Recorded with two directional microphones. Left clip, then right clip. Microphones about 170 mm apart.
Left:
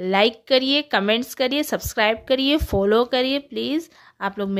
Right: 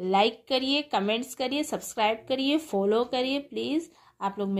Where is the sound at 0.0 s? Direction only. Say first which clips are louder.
Left 5 dB; 40° left (ahead or behind).